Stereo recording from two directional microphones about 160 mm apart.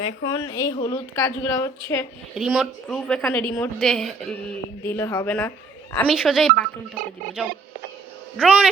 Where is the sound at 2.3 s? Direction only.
5° right (ahead or behind).